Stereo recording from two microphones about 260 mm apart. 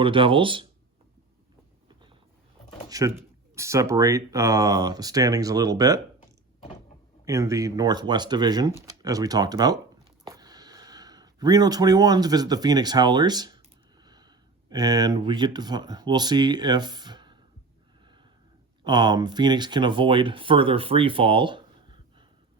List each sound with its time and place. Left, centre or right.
0.0 s speech: centre
2.9 s speech: centre
7.3 s speech: centre
18.8 s speech: centre